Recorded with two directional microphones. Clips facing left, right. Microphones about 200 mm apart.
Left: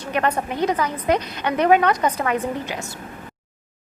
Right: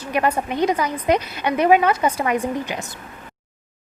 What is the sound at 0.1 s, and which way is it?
A woman's voice, 10° right (ahead or behind).